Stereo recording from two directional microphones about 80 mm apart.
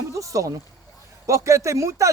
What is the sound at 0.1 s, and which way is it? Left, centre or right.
A man's voice, right.